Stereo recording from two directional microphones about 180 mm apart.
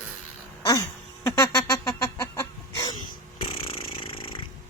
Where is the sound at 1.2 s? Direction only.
15° left (ahead or behind).